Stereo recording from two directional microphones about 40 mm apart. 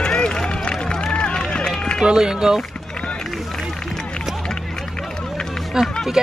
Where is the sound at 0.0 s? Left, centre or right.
Left.